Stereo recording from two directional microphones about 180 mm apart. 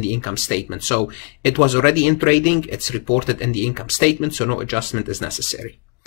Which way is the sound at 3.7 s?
10° left (ahead or behind).